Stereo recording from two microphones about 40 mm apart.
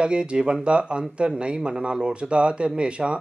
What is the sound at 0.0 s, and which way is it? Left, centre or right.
Speech, right.